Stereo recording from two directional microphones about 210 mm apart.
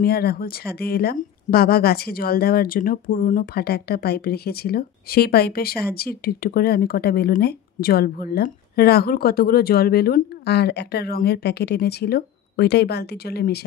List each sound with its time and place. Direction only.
0.0 s speech: 50° left (ahead or behind)